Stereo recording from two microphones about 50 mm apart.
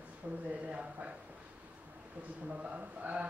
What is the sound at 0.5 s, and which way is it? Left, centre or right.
Speech, right.